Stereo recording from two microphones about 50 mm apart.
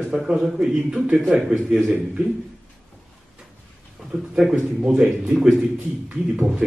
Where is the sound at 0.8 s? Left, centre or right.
Centre.